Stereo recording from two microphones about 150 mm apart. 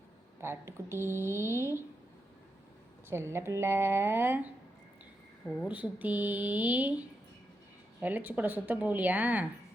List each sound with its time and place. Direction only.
0.4 s speech: 15° right (ahead or behind)
3.1 s speech: 15° right (ahead or behind)
5.6 s speech: 10° right (ahead or behind)
8.0 s speech: 10° right (ahead or behind)